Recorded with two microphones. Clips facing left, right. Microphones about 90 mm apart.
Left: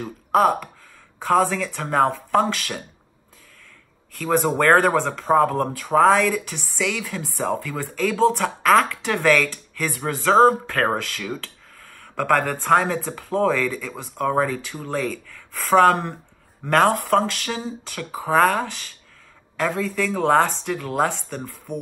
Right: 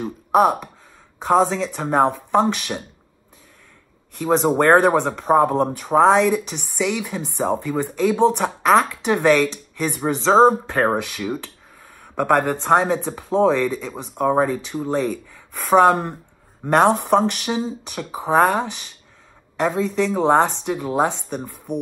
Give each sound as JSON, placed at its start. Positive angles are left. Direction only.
{"t": 0.0, "sound": "speech", "side_deg": -15}
{"t": 4.2, "sound": "speech", "side_deg": -20}